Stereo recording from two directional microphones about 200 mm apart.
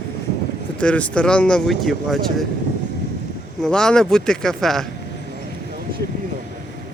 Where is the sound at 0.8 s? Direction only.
5° left (ahead or behind).